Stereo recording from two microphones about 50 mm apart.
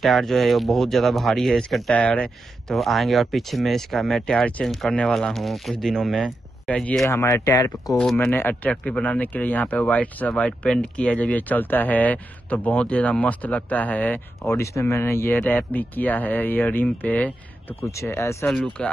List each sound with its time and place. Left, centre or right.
0.0 s speech: centre
1.9 s speech: left
2.7 s speech: centre
4.6 s speech: left
4.9 s speech: centre
7.1 s speech: left
8.3 s speech: left
8.6 s speech: left
14.5 s speech: left
15.3 s speech: left
18.0 s speech: left
18.8 s speech: centre